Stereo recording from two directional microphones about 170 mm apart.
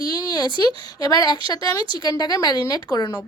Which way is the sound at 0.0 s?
25° left (ahead or behind).